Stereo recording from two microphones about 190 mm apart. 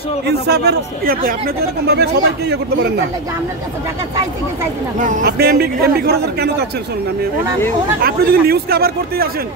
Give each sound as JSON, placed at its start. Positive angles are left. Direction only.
{"t": 0.3, "sound": "a man's voice", "side_deg": -55}
{"t": 4.9, "sound": "a man's voice", "side_deg": -40}
{"t": 5.2, "sound": "a man's voice", "side_deg": -55}
{"t": 8.0, "sound": "speech", "side_deg": -55}